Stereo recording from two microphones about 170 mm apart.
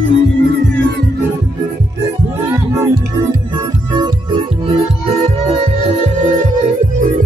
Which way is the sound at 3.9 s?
25° right (ahead or behind).